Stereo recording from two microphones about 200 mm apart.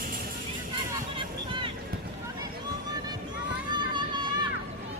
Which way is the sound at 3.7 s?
20° right (ahead or behind).